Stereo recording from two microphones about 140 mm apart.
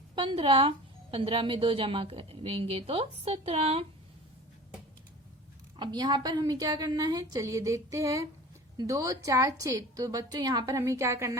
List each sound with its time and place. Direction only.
0.2 s a woman's voice: 40° right (ahead or behind)
5.7 s a woman's voice: 30° right (ahead or behind)